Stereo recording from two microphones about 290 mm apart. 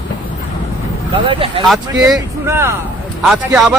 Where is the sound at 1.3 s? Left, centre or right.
Centre.